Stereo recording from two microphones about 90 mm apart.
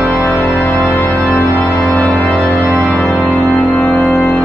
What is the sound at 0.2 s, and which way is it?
Music, 30° left (ahead or behind).